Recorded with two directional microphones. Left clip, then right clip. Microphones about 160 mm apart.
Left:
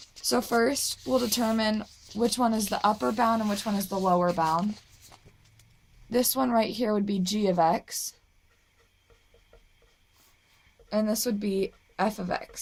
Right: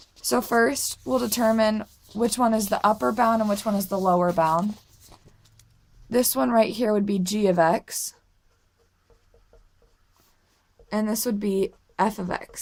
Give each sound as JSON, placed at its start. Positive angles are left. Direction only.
{"t": 0.2, "sound": "speech", "side_deg": -40}
{"t": 6.1, "sound": "a woman's voice", "side_deg": -45}
{"t": 10.8, "sound": "a woman's voice", "side_deg": -45}